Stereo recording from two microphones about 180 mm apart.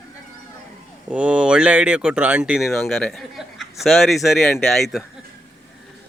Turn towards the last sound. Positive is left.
turn(degrees=0)  # may be behind; listen again after turning